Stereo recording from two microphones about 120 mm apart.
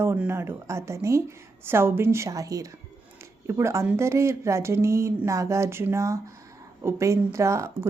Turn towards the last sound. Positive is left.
turn(degrees=-25)  # may be behind; listen again after turning